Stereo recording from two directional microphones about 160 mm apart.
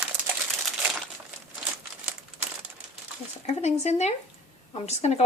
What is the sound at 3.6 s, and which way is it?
A woman's voice, 45° left (ahead or behind).